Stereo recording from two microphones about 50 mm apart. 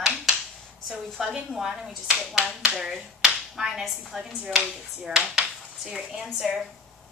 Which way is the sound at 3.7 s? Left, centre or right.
Centre.